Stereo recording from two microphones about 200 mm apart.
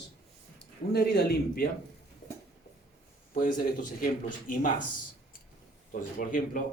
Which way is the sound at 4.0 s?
45° left (ahead or behind).